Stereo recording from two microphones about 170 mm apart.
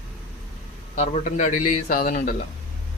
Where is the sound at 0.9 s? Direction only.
40° left (ahead or behind).